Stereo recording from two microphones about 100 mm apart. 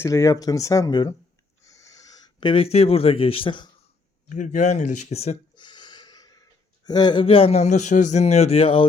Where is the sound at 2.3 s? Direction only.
60° left (ahead or behind).